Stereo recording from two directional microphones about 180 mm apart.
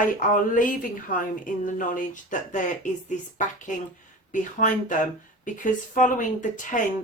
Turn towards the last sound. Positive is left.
turn(degrees=45)  # may be behind; listen again after turning